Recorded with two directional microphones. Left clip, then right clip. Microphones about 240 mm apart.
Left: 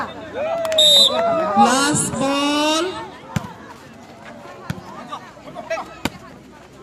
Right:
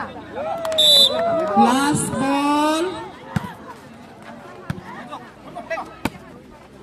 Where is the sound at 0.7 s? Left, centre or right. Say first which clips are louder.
Left 1 dB; left.